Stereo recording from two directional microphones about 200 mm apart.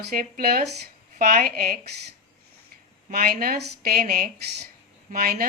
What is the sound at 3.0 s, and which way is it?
Speech, 50° right (ahead or behind).